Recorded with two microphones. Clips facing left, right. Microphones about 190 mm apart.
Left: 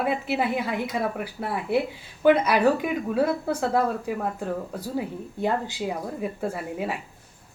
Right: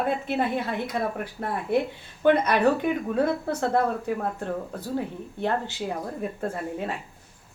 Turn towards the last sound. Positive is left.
turn(degrees=10)  # may be behind; listen again after turning